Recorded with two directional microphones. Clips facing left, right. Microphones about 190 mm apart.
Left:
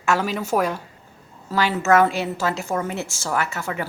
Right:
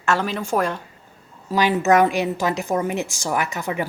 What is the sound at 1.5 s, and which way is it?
A woman's voice, 15° right (ahead or behind).